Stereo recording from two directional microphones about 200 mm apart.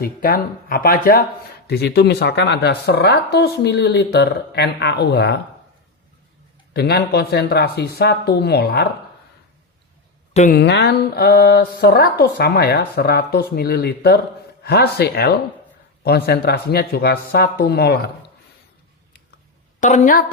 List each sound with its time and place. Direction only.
0.0 s speech: 50° left (ahead or behind)
6.7 s speech: 55° left (ahead or behind)
10.5 s speech: 60° left (ahead or behind)
19.8 s a woman's voice: 35° left (ahead or behind)